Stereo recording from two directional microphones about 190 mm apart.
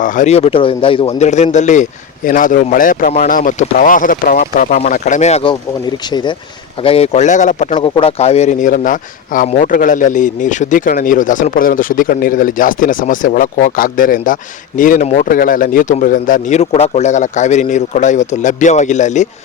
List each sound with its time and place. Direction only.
0.0 s speech: 45° left (ahead or behind)
7.9 s speech: 30° left (ahead or behind)